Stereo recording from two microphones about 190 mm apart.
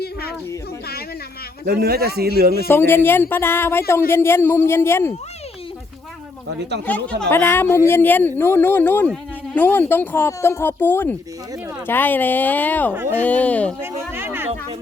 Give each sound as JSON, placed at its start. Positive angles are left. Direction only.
{"t": 0.0, "sound": "speech", "side_deg": 55}
{"t": 1.6, "sound": "a man's voice", "side_deg": -55}
{"t": 2.6, "sound": "speech", "side_deg": 10}
{"t": 6.8, "sound": "speech", "side_deg": 10}
{"t": 12.9, "sound": "speech", "side_deg": -10}
{"t": 13.1, "sound": "speech", "side_deg": 5}
{"t": 14.1, "sound": "a sound", "side_deg": -10}